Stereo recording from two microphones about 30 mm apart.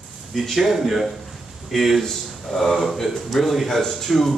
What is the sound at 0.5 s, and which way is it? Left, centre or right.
A man's voice, centre.